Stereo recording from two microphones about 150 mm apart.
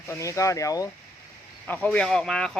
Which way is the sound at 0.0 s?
20° left (ahead or behind).